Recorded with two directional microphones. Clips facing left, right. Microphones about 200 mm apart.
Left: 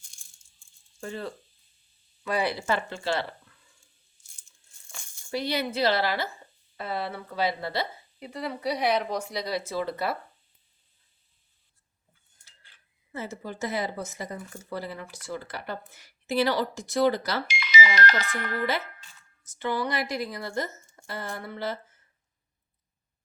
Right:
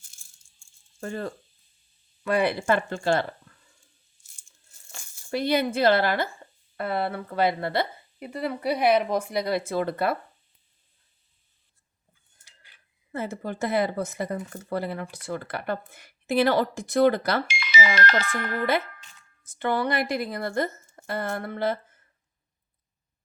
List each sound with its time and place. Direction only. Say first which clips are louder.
0.9 s speech: right 3 dB; 50° right (ahead or behind)
5.3 s speech: right 5 dB; 55° right (ahead or behind)
13.1 s speech: right 4 dB; 55° right (ahead or behind)